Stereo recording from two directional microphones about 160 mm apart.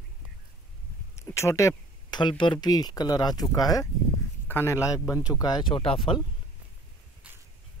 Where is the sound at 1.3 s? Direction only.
20° left (ahead or behind); by 6.2 s 35° left (ahead or behind).